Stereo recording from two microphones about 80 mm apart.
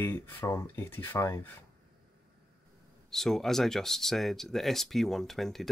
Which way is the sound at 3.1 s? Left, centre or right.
Centre.